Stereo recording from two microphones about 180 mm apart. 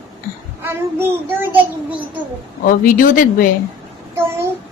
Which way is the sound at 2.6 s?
50° left (ahead or behind).